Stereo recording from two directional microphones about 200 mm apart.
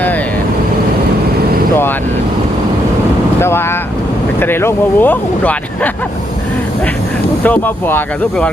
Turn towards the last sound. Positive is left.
turn(degrees=10)  # may be behind; listen again after turning